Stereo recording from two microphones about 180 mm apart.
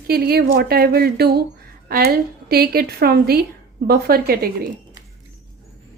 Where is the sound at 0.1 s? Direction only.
60° right (ahead or behind).